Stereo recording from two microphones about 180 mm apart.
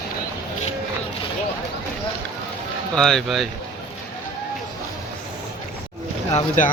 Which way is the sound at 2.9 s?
Centre (ahead or behind).